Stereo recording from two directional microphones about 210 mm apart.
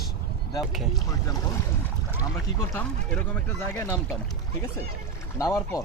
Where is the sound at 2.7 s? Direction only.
10° left (ahead or behind).